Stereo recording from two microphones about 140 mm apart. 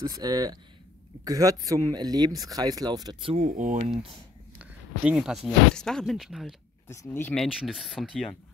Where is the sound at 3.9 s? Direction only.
40° right (ahead or behind).